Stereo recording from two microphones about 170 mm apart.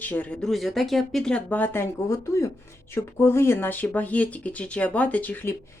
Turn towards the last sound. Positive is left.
turn(degrees=10)  # may be behind; listen again after turning